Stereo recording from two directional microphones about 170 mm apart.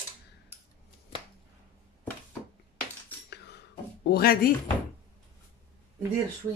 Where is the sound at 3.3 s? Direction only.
75° left (ahead or behind).